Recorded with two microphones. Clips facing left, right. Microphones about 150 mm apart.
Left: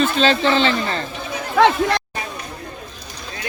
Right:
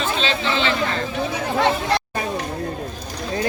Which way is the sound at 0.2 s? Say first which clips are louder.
Left 6 dB; 40° left (ahead or behind).